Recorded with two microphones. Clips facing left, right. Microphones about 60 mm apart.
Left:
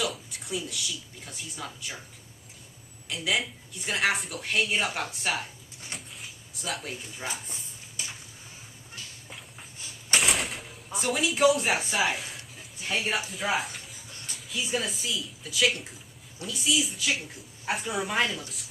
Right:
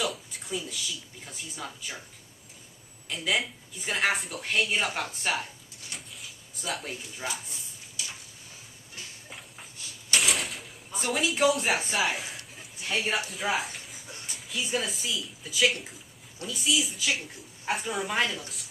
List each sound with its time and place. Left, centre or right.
0.0 s speech: centre
3.1 s a woman's voice: centre
5.9 s drawer open or close: centre
8.0 s a sound: left
10.2 s a sound: centre
14.5 s a woman's voice: centre